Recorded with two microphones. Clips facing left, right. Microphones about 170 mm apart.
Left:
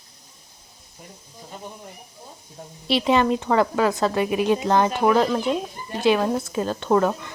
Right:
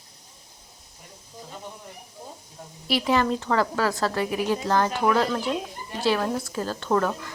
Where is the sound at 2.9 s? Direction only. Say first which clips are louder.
Left 3 dB; 25° left (ahead or behind).